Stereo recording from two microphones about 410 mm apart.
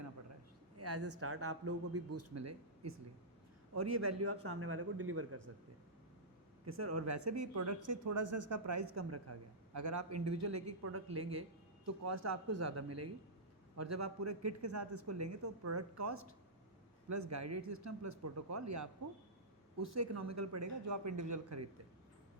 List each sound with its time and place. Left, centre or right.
0.8 s speech: right
6.7 s speech: right